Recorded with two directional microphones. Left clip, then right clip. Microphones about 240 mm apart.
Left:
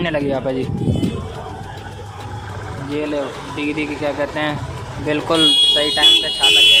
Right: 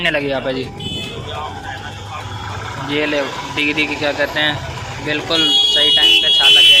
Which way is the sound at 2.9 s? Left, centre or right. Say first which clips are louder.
Right 4 dB; centre.